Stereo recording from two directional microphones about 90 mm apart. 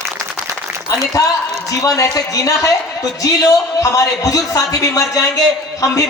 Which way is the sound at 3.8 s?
40° left (ahead or behind).